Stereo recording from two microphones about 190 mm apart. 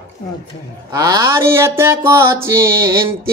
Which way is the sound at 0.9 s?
20° right (ahead or behind).